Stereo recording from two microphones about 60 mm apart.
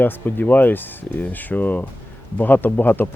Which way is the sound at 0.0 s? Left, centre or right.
Left.